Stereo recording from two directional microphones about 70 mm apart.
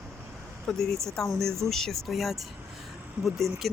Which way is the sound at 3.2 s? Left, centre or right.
Centre.